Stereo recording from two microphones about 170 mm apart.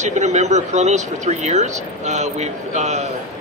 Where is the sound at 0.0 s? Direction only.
45° right (ahead or behind).